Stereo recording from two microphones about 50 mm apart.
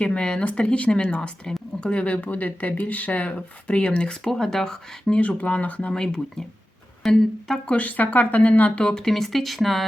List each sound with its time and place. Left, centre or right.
0.0 s speech: centre
5.4 s speech: left
5.9 s speech: centre
7.0 s music: centre
7.7 s speech: left
8.8 s speech: centre